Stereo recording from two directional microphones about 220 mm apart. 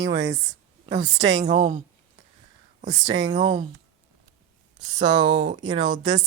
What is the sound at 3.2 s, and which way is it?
Speech, 20° right (ahead or behind).